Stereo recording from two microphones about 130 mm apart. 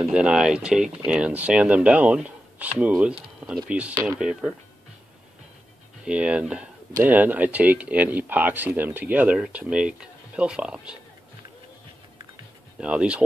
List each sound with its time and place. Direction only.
0.1 s speech: 5° right (ahead or behind)
3.9 s speech: 25° right (ahead or behind)
4.2 s speech: 5° right (ahead or behind)
6.0 s speech: 10° right (ahead or behind)
12.8 s speech: 10° right (ahead or behind)